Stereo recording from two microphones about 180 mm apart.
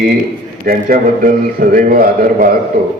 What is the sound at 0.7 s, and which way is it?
A man's voice, 50° right (ahead or behind).